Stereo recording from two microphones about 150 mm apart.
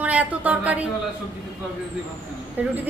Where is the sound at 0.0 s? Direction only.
10° right (ahead or behind).